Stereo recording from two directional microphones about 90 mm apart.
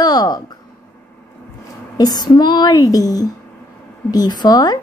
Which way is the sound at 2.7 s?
40° left (ahead or behind).